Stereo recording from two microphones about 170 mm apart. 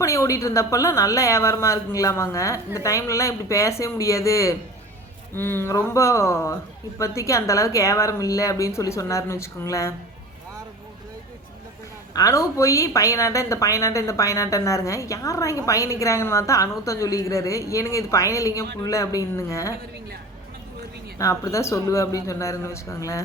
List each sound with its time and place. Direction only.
0.0 s a woman's voice: 20° left (ahead or behind)
12.1 s a woman's voice: 20° left (ahead or behind)
21.2 s a woman's voice: 20° left (ahead or behind)